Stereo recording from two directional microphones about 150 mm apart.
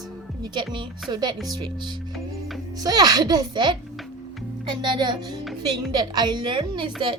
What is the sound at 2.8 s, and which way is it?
A child's voice, 25° right (ahead or behind).